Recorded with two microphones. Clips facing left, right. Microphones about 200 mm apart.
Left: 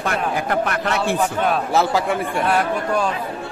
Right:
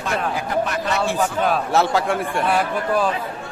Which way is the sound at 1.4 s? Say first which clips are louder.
Right 1 dB; centre (ahead or behind).